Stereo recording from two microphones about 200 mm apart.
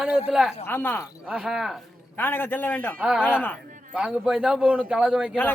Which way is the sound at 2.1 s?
10° left (ahead or behind).